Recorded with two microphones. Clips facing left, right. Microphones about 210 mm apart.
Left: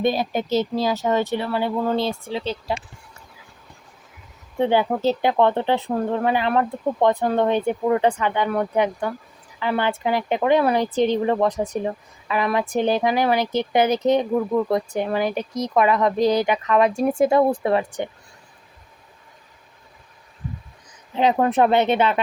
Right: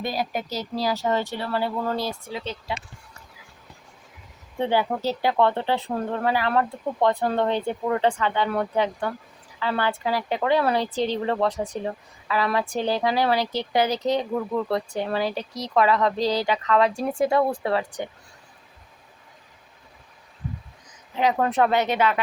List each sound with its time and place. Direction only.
0.0 s a woman's voice: 25° left (ahead or behind)
4.6 s a woman's voice: 15° left (ahead or behind)
21.3 s a woman's voice: 20° left (ahead or behind)